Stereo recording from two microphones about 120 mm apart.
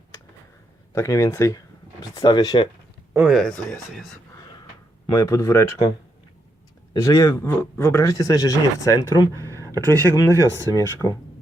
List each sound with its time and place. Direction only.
0.9 s speech: 25° left (ahead or behind)
3.2 s speech: 5° left (ahead or behind)
5.0 s a man's voice: 25° left (ahead or behind)
7.0 s a man's voice: 30° left (ahead or behind)
9.0 s speech: 40° left (ahead or behind)
9.3 s a sound: 25° right (ahead or behind)
10.3 s speech: 25° right (ahead or behind)
10.8 s a man's voice: 30° left (ahead or behind)